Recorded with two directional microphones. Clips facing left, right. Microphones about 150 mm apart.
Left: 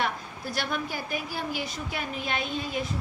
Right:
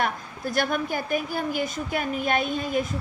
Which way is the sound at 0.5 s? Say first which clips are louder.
Right 6 dB; 50° right (ahead or behind).